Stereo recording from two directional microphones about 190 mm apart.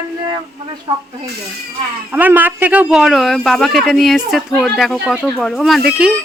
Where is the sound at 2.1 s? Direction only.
10° right (ahead or behind).